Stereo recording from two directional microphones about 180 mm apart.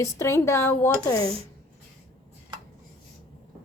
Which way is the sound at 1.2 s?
30° right (ahead or behind).